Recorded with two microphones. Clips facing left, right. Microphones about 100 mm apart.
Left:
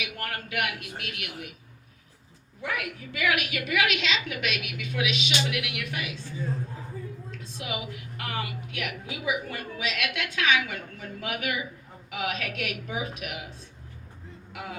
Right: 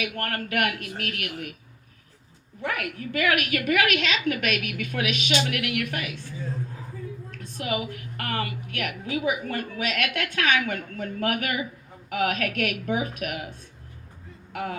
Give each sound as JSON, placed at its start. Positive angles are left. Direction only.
{"t": 0.0, "sound": "a woman's voice", "side_deg": -55}
{"t": 2.6, "sound": "a woman's voice", "side_deg": -55}
{"t": 7.3, "sound": "a woman's voice", "side_deg": -55}
{"t": 14.5, "sound": "a man's voice", "side_deg": -50}